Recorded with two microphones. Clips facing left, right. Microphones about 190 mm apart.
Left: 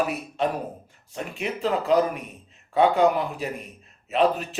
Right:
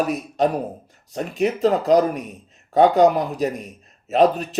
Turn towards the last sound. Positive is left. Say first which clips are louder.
# right 5 dB
turn(degrees=-40)  # may be behind; listen again after turning